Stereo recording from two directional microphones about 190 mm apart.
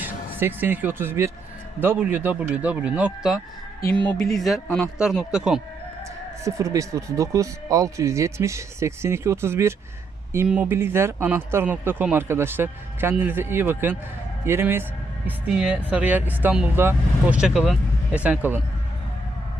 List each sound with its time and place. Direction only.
0.0 s speech: 10° right (ahead or behind)
6.4 s speech: 15° right (ahead or behind)